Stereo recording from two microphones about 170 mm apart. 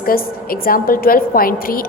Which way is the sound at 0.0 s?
60° left (ahead or behind).